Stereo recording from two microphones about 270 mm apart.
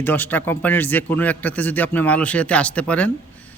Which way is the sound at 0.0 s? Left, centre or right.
Centre.